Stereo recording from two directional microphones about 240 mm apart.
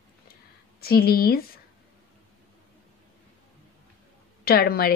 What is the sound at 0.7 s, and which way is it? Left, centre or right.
Speech, left.